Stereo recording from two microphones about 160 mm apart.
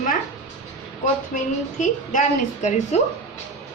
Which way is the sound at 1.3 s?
50° left (ahead or behind).